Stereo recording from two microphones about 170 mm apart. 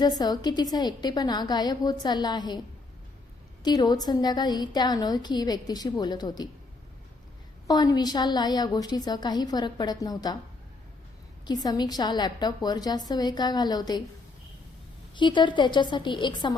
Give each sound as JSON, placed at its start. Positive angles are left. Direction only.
{"t": 0.0, "sound": "a woman's voice", "side_deg": 25}
{"t": 3.6, "sound": "a woman's voice", "side_deg": 25}
{"t": 7.7, "sound": "a woman's voice", "side_deg": 25}
{"t": 11.4, "sound": "a woman's voice", "side_deg": 25}
{"t": 15.1, "sound": "a woman's voice", "side_deg": 30}